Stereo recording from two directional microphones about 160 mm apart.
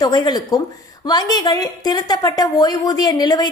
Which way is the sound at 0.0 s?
25° left (ahead or behind).